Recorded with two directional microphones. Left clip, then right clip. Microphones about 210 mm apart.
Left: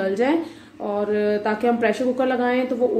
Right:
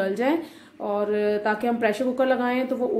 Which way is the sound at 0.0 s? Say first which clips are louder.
Left 3 dB; 20° right (ahead or behind).